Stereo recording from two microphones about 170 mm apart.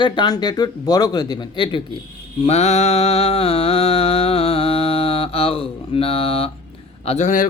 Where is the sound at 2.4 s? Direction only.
40° left (ahead or behind).